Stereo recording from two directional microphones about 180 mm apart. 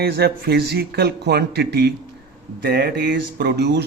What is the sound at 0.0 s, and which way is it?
A man's voice, 60° right (ahead or behind).